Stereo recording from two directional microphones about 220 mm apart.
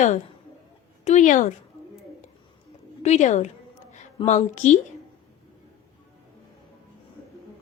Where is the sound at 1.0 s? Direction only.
35° left (ahead or behind).